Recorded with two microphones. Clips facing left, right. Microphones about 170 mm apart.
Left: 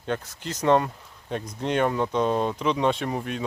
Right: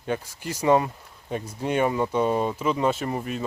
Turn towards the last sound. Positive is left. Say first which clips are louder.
# even
turn(degrees=0)  # may be behind; listen again after turning